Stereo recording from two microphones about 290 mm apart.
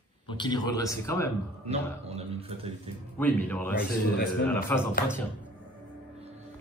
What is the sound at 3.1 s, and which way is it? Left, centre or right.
Speech, centre.